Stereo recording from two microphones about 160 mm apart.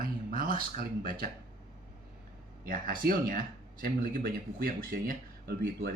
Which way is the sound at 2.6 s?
65° right (ahead or behind).